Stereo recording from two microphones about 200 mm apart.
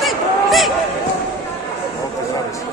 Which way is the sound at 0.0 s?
Centre (ahead or behind).